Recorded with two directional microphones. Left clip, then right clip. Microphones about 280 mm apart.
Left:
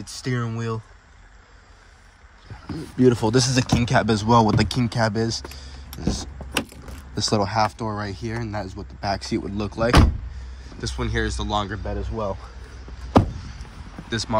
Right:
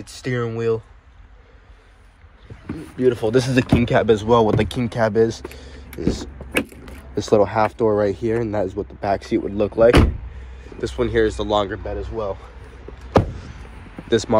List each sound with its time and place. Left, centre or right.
0.0 s speech: centre
3.0 s speech: left
3.3 s speech: centre
11.8 s speech: left
14.1 s speech: centre